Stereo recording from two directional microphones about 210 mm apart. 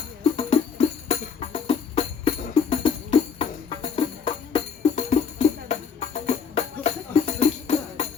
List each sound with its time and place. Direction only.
0.3 s music: 30° left (ahead or behind)